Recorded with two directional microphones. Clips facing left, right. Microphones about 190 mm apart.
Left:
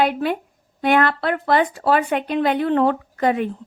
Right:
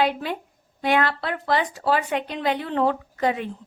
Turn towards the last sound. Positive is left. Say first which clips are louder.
# left 4 dB
turn(degrees=55)  # may be behind; listen again after turning